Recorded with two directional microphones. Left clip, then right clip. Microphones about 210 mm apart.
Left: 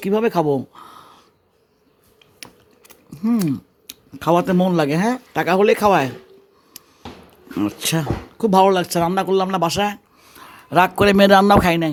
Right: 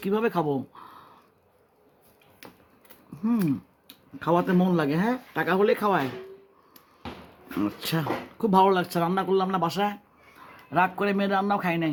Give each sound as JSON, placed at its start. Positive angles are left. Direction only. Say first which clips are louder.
{"t": 0.0, "sound": "speech", "louder": "left 7 dB", "side_deg": 30}
{"t": 2.4, "sound": "speech", "louder": "left 8 dB", "side_deg": 40}
{"t": 7.6, "sound": "speech", "louder": "left 7 dB", "side_deg": 35}